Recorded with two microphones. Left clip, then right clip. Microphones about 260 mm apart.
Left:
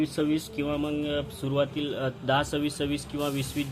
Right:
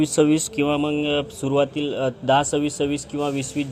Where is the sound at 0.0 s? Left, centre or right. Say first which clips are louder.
Right 9 dB; right.